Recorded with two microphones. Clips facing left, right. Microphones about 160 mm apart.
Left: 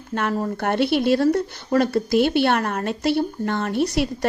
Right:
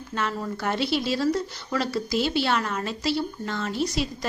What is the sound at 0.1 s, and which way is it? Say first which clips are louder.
Speech: left 6 dB; 50° left (ahead or behind).